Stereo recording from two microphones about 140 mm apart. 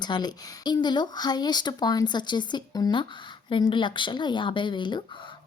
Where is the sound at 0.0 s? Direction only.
30° left (ahead or behind).